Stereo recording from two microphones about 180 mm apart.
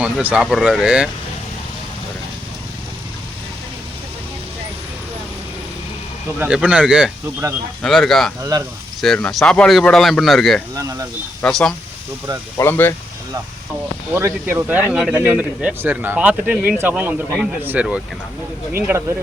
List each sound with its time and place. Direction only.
0.0 s speech: 5° right (ahead or behind)
6.7 s speech: 5° right (ahead or behind)
8.4 s speech: 20° right (ahead or behind)
9.0 s speech: 5° left (ahead or behind)
14.1 s speech: 15° right (ahead or behind)